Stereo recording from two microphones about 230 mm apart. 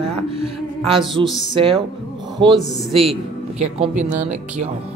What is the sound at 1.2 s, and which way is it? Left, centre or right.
Speech, centre.